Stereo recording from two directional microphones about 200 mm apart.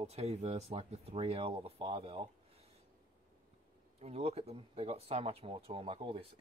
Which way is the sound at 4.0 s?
30° right (ahead or behind).